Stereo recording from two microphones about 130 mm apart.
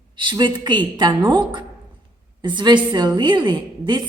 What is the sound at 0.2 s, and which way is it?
A woman's voice, 35° right (ahead or behind).